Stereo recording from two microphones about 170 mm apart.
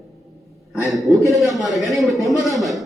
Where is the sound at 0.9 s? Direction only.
Centre (ahead or behind).